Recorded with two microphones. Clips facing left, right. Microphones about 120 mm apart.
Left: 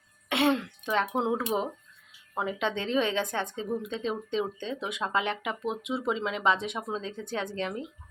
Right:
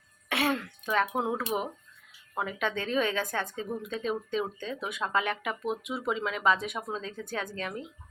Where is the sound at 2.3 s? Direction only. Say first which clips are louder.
Left 1 dB; 25° left (ahead or behind).